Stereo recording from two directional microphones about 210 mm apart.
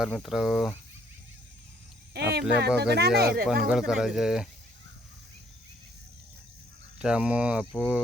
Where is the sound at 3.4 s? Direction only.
5° right (ahead or behind).